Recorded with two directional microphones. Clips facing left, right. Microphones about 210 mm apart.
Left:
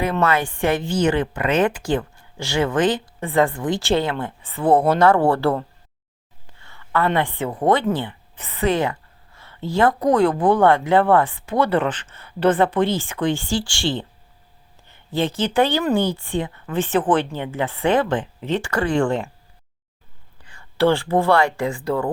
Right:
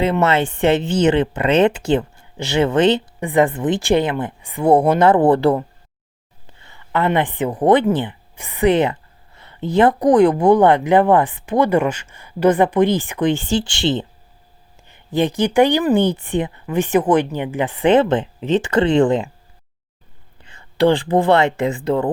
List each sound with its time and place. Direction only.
0.0 s a woman's voice: 25° right (ahead or behind)
20.4 s speech: 20° right (ahead or behind)